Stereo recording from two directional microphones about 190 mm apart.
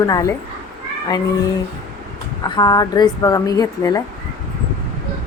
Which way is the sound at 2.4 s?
20° left (ahead or behind).